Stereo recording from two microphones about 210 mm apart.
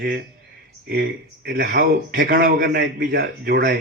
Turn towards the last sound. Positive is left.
turn(degrees=-45)  # may be behind; listen again after turning